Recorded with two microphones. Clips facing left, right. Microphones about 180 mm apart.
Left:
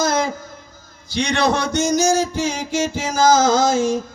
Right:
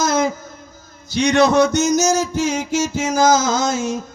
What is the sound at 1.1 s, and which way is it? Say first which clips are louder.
Music: right 5 dB; 45° right (ahead or behind).